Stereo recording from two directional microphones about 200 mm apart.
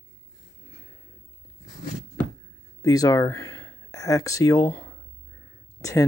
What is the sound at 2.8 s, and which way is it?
Speech, 15° left (ahead or behind).